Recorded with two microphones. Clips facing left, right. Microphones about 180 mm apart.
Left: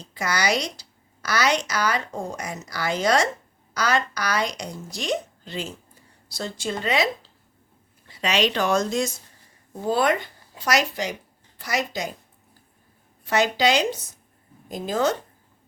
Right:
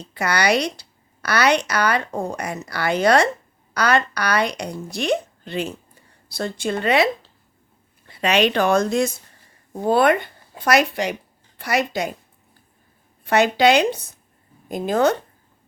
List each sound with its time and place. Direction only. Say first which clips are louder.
0.0 s a woman's voice: right 4 dB; 60° right (ahead or behind)
13.2 s speech: right 5 dB; 60° right (ahead or behind)